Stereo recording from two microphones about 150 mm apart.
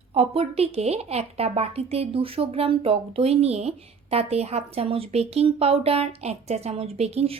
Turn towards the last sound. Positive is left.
turn(degrees=-45)  # may be behind; listen again after turning